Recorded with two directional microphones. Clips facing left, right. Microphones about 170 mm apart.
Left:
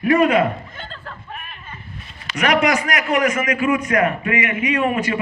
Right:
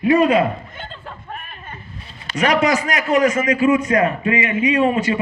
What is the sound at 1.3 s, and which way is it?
Sheep, 40° right (ahead or behind).